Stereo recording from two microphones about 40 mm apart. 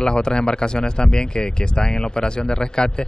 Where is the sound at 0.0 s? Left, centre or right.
Left.